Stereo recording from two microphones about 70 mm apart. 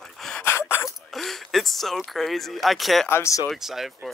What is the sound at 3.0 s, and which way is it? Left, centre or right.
Speech, left.